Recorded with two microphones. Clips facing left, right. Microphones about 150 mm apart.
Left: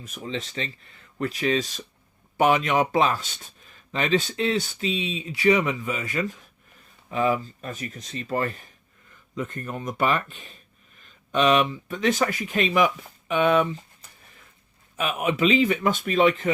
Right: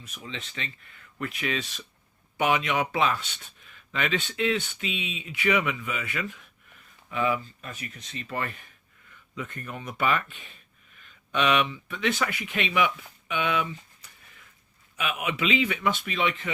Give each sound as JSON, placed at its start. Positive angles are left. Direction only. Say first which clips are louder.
{"t": 0.0, "sound": "speech", "louder": "left 8 dB", "side_deg": 45}